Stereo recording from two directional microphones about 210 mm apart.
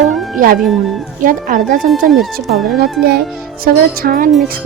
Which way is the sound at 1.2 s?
40° right (ahead or behind).